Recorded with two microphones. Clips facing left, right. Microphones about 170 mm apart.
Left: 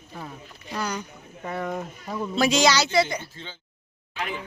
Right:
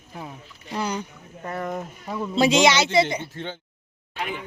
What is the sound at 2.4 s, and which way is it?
Speech, 25° right (ahead or behind).